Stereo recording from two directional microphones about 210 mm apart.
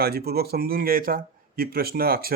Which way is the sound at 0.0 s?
45° right (ahead or behind).